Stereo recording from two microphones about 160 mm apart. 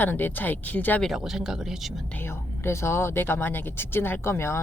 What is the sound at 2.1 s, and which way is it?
Speech, 15° left (ahead or behind).